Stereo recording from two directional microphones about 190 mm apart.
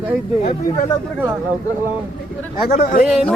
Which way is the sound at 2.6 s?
45° left (ahead or behind).